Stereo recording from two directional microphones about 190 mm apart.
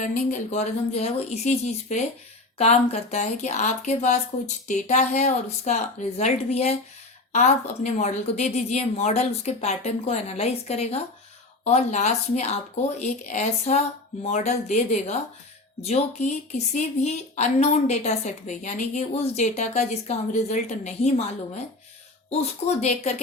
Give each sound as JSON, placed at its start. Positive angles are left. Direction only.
{"t": 0.0, "sound": "a woman's voice", "side_deg": 40}
{"t": 22.3, "sound": "a woman's voice", "side_deg": 35}